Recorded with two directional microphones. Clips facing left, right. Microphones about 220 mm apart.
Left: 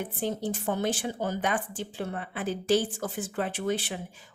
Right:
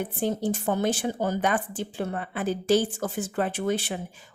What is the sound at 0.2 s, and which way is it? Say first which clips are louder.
Speech: right 4 dB; 45° right (ahead or behind).